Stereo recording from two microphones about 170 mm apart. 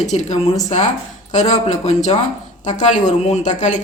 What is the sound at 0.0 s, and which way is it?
A woman's voice, 45° left (ahead or behind).